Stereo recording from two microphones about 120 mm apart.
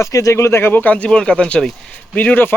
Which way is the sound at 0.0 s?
25° left (ahead or behind).